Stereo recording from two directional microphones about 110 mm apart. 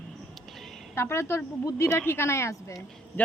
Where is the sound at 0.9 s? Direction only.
25° left (ahead or behind).